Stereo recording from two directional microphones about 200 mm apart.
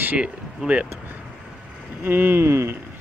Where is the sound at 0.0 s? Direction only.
5° right (ahead or behind).